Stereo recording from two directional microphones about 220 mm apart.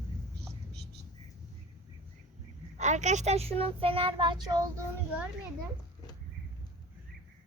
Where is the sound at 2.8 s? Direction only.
30° right (ahead or behind).